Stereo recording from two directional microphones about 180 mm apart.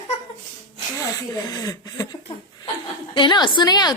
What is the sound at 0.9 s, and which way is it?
Speech, 20° left (ahead or behind).